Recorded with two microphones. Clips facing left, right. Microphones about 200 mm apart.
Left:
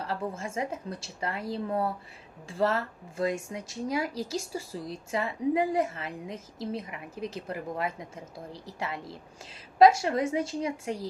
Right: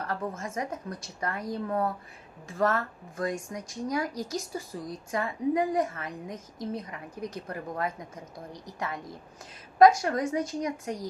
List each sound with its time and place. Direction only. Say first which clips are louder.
0.1 s a woman's voice: left 1 dB; 30° left (ahead or behind)